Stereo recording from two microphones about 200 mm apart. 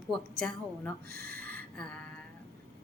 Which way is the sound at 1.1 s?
50° right (ahead or behind).